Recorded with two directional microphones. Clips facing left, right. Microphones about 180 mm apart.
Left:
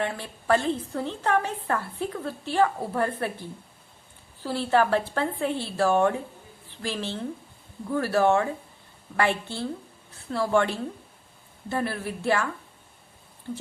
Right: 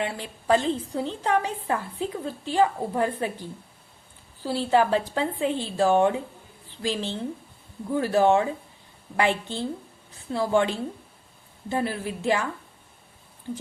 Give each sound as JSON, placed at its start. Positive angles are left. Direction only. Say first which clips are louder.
{"t": 0.0, "sound": "a woman's voice", "louder": "even", "side_deg": -15}
{"t": 4.4, "sound": "a woman's voice", "louder": "right 1 dB", "side_deg": -15}